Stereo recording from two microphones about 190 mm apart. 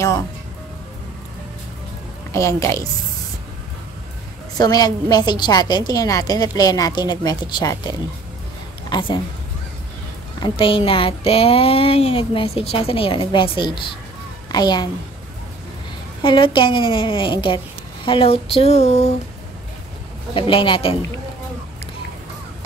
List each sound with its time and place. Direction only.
2.3 s a woman's voice: 15° left (ahead or behind)
4.6 s a woman's voice: 20° left (ahead or behind)
8.9 s speech: 25° left (ahead or behind)
10.4 s a woman's voice: 25° left (ahead or behind)
16.2 s a woman's voice: 25° left (ahead or behind)
20.3 s a woman's voice: 25° left (ahead or behind)